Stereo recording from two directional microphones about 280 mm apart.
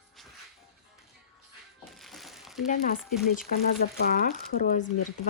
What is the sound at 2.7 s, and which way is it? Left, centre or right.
Speech, left.